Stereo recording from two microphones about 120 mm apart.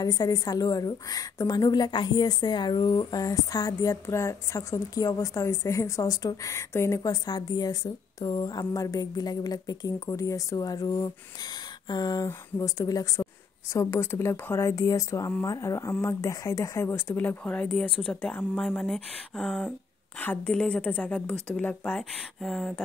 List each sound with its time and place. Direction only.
0.0 s a woman's voice: 30° left (ahead or behind); by 22.8 s centre (ahead or behind)